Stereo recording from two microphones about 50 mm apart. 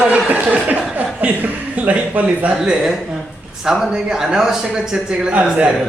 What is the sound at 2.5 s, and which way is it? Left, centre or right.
A man's voice, centre.